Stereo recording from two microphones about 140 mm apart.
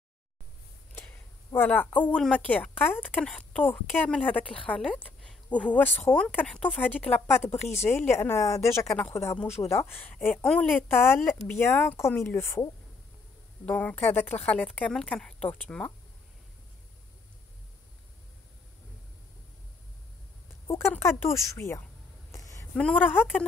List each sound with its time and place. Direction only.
0.9 s a woman's voice: 15° left (ahead or behind)
13.7 s speech: 10° left (ahead or behind)
20.6 s a woman's voice: 20° left (ahead or behind)
22.3 s a sound: 25° left (ahead or behind)
22.8 s speech: 10° left (ahead or behind)